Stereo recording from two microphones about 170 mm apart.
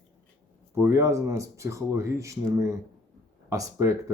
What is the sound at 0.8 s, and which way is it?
Speech, 15° right (ahead or behind).